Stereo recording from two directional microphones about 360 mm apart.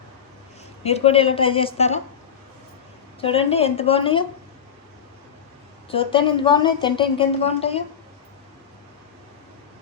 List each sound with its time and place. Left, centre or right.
0.9 s a woman's voice: centre
3.2 s a woman's voice: centre
5.9 s a woman's voice: centre